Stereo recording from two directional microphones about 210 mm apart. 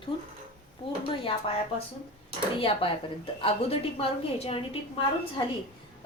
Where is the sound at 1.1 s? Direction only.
25° left (ahead or behind).